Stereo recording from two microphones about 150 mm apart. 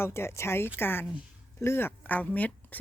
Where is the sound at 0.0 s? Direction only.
15° left (ahead or behind).